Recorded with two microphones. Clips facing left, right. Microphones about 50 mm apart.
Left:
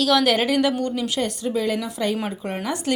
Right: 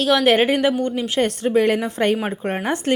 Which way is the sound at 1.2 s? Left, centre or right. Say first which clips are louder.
Right 9 dB; right.